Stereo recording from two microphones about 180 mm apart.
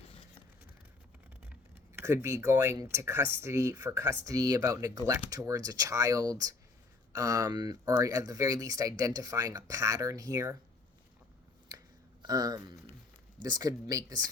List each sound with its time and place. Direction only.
1.7 s speech: 15° right (ahead or behind)
12.2 s speech: 20° right (ahead or behind)